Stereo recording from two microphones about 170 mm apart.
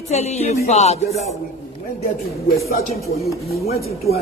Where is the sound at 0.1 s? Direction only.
40° left (ahead or behind).